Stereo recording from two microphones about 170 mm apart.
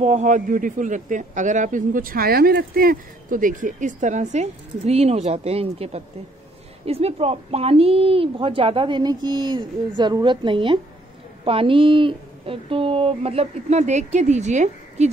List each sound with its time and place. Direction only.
0.0 s a man's voice: 45° right (ahead or behind)